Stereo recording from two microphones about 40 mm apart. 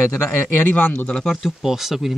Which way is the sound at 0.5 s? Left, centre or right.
Left.